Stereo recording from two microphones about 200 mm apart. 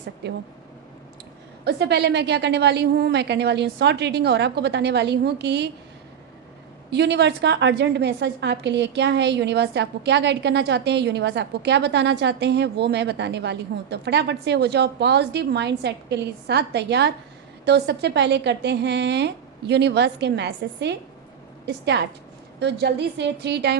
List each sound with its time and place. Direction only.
0.2 s a woman's voice: 55° right (ahead or behind)
1.6 s a woman's voice: 55° right (ahead or behind)
6.9 s a woman's voice: 60° right (ahead or behind)